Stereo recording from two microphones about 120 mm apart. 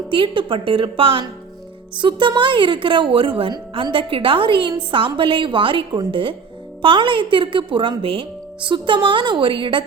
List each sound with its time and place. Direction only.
0.1 s speech: 45° right (ahead or behind)